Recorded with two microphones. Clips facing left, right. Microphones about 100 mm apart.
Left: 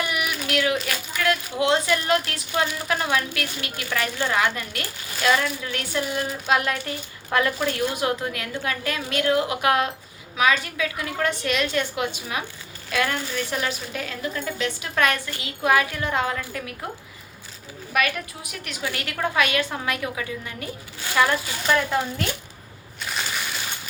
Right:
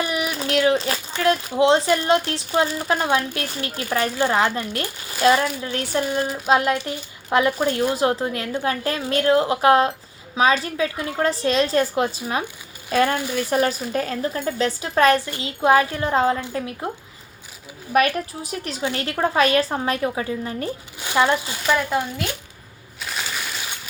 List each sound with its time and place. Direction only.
0.0 s a woman's voice: 30° right (ahead or behind)
18.1 s a woman's voice: 35° right (ahead or behind)
21.0 s speech: 20° right (ahead or behind)
23.0 s crushing: centre (ahead or behind)